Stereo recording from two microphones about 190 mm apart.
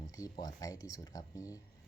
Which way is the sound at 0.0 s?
20° left (ahead or behind).